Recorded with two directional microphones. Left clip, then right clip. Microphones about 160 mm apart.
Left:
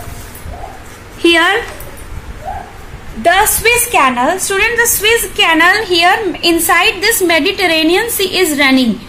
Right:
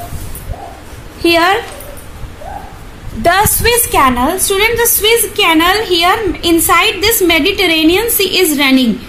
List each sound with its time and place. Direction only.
1.2 s a woman's voice: 5° left (ahead or behind)
3.2 s a woman's voice: 30° right (ahead or behind)
3.6 s a woman's voice: 20° right (ahead or behind)